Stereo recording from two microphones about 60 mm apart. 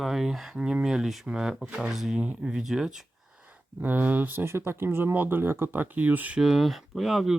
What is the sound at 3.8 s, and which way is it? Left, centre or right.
Speech, right.